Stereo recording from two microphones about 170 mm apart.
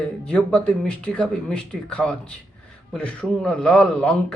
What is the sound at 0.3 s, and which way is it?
A man's voice, 5° left (ahead or behind).